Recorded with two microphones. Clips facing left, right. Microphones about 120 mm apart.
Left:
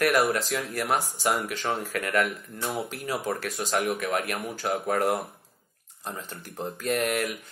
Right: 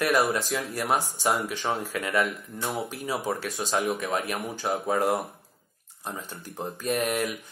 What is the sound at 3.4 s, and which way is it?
Speech, 25° right (ahead or behind).